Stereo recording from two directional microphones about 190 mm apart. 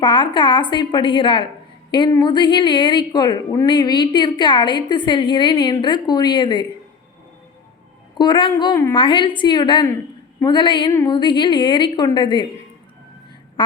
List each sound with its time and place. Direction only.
0.0 s a woman's voice: 25° left (ahead or behind)
8.2 s a woman's voice: 25° left (ahead or behind)
9.0 s a woman's voice: 25° left (ahead or behind)
13.6 s quack: 25° left (ahead or behind)